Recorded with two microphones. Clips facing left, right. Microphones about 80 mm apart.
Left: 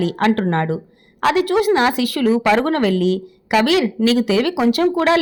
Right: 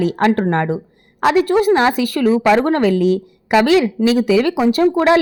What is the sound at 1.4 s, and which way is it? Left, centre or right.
Speech, right.